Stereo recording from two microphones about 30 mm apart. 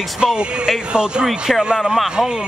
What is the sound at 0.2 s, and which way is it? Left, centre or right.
Speech, right.